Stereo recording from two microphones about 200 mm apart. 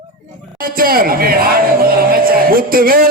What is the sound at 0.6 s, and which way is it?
Speech, 45° right (ahead or behind).